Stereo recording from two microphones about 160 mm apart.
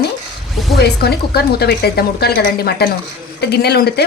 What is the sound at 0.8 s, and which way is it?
A woman's voice, 85° left.